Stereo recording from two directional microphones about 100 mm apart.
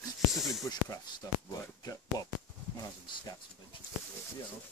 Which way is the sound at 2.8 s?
35° left (ahead or behind).